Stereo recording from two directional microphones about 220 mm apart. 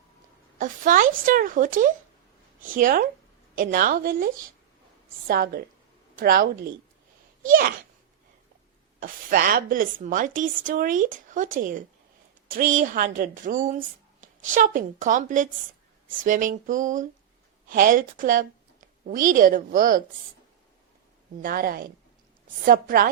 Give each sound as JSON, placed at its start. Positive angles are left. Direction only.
{"t": 0.6, "sound": "a woman's voice", "side_deg": -35}
{"t": 5.3, "sound": "a woman's voice", "side_deg": -40}
{"t": 9.0, "sound": "a woman's voice", "side_deg": -40}
{"t": 12.5, "sound": "a woman's voice", "side_deg": -35}
{"t": 21.4, "sound": "a woman's voice", "side_deg": -40}